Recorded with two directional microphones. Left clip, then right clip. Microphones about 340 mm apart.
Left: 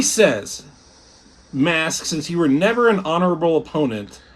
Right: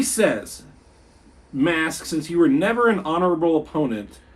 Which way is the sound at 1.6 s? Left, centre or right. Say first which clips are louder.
Left 2 dB; left.